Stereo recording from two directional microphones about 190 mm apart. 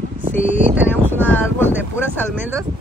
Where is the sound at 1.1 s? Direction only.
10° left (ahead or behind).